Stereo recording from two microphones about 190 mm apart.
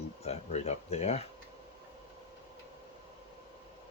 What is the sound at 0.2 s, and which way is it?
Speech, 35° left (ahead or behind).